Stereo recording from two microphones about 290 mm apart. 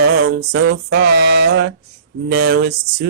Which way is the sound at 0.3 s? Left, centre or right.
Right.